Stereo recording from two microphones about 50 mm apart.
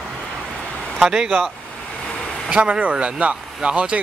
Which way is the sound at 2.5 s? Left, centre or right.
Right.